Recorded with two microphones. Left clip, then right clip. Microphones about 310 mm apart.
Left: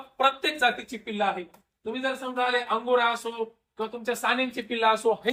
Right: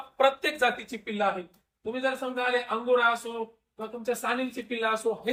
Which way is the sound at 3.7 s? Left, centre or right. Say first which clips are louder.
Left 2 dB; centre.